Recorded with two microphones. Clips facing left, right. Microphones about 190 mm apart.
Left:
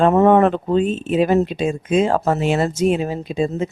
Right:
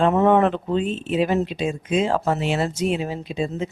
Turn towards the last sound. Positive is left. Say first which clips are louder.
# left 5 dB
turn(degrees=45)  # may be behind; listen again after turning